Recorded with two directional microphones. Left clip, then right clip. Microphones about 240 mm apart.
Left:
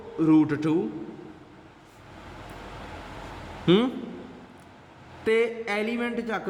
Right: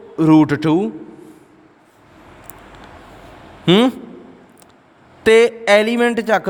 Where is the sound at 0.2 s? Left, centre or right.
Right.